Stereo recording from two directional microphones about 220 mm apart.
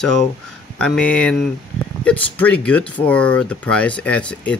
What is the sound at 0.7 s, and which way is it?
Speech, 5° left (ahead or behind).